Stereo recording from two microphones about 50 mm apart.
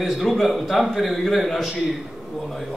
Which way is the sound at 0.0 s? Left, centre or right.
Centre.